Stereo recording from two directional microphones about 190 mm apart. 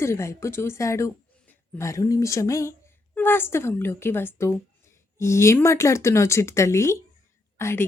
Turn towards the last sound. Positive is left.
turn(degrees=15)  # may be behind; listen again after turning